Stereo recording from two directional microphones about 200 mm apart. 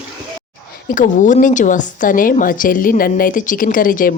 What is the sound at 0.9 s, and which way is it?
A woman's voice, 40° left (ahead or behind).